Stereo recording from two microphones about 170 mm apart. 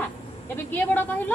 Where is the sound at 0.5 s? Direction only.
10° left (ahead or behind).